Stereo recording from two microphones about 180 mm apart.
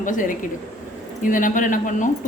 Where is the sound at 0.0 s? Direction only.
45° left (ahead or behind).